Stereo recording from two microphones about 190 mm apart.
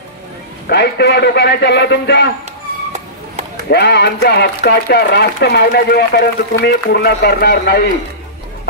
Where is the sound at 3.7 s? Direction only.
60° left (ahead or behind).